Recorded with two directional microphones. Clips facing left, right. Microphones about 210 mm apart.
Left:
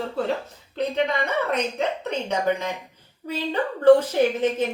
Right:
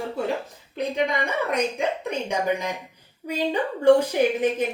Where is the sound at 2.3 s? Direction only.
10° right (ahead or behind).